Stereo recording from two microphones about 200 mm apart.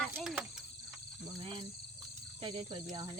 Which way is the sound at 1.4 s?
25° right (ahead or behind).